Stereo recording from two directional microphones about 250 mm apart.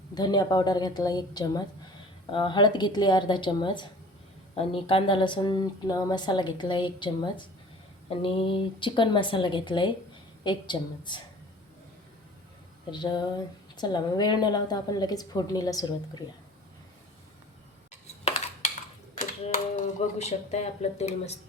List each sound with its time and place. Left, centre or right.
0.1 s a woman's voice: centre
12.9 s a woman's voice: centre
19.7 s a woman's voice: left